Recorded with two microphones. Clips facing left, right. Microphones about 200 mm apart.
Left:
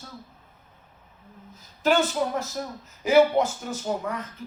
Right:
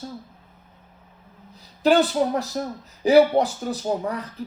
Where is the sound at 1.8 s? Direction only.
35° right (ahead or behind).